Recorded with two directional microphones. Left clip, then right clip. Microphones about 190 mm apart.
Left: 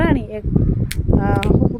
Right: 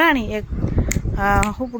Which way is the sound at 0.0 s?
5° left (ahead or behind).